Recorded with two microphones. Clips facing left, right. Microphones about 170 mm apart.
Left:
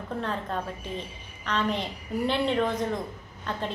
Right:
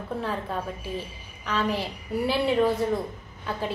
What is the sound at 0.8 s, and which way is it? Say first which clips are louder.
A woman's voice: right 2 dB; 5° right (ahead or behind).